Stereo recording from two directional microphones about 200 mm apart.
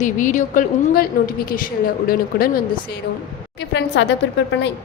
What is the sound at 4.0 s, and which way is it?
Speech, 60° left (ahead or behind).